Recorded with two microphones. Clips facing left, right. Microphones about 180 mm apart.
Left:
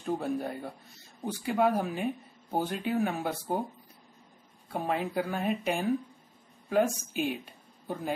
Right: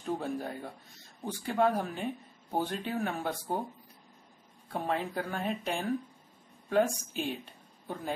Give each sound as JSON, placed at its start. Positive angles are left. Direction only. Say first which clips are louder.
{"t": 0.0, "sound": "speech", "louder": "left 3 dB", "side_deg": 5}
{"t": 4.7, "sound": "speech", "louder": "left 2 dB", "side_deg": 5}